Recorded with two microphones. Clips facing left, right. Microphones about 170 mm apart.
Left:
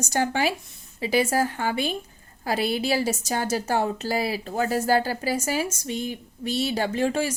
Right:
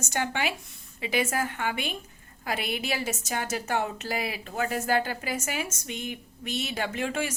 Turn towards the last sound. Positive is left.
turn(degrees=35)  # may be behind; listen again after turning